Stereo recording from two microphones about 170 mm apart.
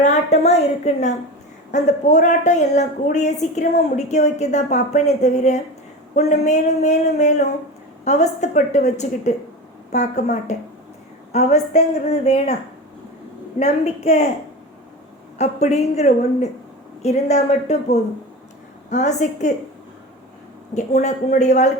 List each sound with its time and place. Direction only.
0.0 s a woman's voice: 40° left (ahead or behind)
13.6 s a woman's voice: 40° left (ahead or behind)
15.4 s a woman's voice: 40° left (ahead or behind)
20.7 s a woman's voice: 45° left (ahead or behind)